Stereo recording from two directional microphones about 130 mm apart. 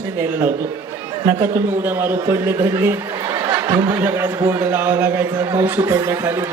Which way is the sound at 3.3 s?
20° right (ahead or behind).